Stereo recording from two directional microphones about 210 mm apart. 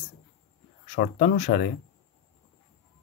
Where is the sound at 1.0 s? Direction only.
40° left (ahead or behind).